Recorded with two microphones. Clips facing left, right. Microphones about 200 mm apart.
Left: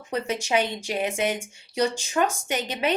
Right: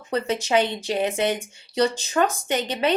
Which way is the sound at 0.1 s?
10° left (ahead or behind).